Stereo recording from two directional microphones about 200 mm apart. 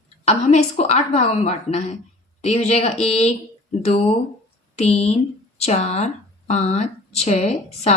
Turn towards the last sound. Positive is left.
turn(degrees=35)  # may be behind; listen again after turning